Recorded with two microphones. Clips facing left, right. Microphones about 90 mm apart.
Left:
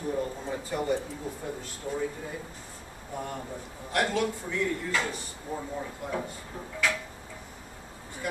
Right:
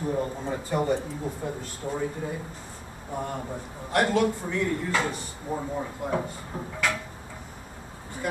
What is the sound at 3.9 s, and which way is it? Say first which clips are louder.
Speech: right 4 dB; 45° right (ahead or behind).